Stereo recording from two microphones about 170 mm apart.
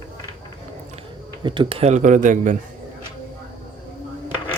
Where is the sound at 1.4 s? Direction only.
30° right (ahead or behind); by 2.6 s 50° right (ahead or behind).